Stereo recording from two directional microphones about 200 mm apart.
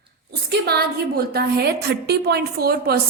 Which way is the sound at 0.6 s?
50° right (ahead or behind).